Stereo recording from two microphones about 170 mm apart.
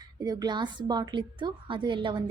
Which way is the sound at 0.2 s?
25° right (ahead or behind).